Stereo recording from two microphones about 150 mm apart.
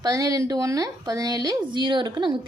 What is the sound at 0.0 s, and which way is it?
A woman's voice, 25° right (ahead or behind).